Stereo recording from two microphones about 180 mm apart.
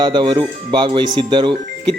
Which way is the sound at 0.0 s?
25° right (ahead or behind).